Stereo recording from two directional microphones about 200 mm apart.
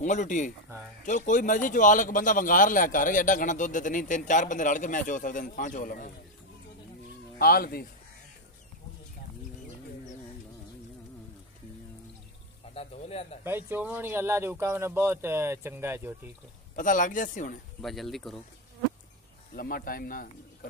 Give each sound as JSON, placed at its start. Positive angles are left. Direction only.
{"t": 0.0, "sound": "a man's voice", "side_deg": 40}
{"t": 7.3, "sound": "speech", "side_deg": 50}
{"t": 12.7, "sound": "a man's voice", "side_deg": 30}
{"t": 13.4, "sound": "speech", "side_deg": -10}
{"t": 16.7, "sound": "a man's voice", "side_deg": 40}
{"t": 17.8, "sound": "speech", "side_deg": 0}
{"t": 19.5, "sound": "speech", "side_deg": 45}